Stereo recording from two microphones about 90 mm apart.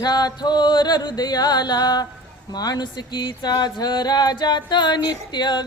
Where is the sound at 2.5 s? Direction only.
50° left (ahead or behind).